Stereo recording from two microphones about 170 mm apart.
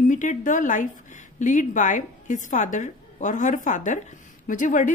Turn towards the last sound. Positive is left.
turn(degrees=50)  # may be behind; listen again after turning